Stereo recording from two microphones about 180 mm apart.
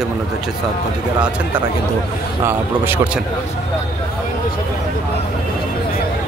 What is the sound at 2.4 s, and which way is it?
Speech, 10° right (ahead or behind).